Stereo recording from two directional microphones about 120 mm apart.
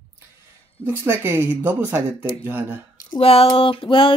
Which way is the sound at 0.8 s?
20° right (ahead or behind).